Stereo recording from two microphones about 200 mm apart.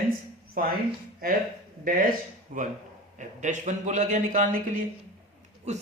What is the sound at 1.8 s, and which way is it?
Speech, 45° right (ahead or behind).